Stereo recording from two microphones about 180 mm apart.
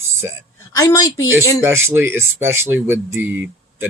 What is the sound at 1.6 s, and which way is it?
Speech, 15° right (ahead or behind).